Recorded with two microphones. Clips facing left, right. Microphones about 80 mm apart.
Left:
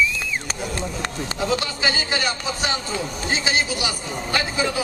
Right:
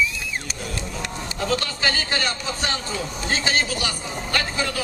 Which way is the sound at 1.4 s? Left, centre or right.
Centre.